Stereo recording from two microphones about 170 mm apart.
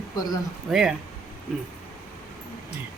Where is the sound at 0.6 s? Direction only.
5° right (ahead or behind).